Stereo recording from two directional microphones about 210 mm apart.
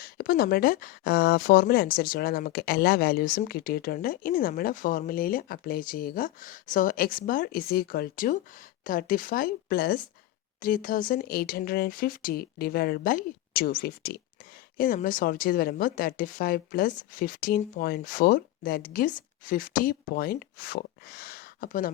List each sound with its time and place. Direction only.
0.0 s speech: 45° left (ahead or behind)